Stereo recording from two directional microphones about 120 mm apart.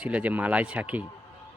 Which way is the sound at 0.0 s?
10° right (ahead or behind).